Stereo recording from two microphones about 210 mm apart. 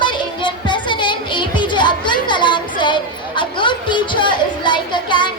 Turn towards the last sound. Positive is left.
turn(degrees=20)  # may be behind; listen again after turning